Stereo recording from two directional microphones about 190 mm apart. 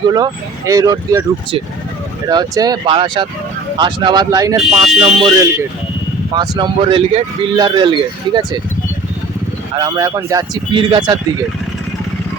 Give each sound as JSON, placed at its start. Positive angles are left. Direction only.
{"t": 0.1, "sound": "speech", "side_deg": -20}
{"t": 4.5, "sound": "speech", "side_deg": -5}
{"t": 6.3, "sound": "speech", "side_deg": -20}
{"t": 9.7, "sound": "speech", "side_deg": -20}